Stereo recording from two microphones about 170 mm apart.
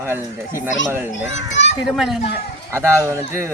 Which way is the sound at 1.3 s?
90° left.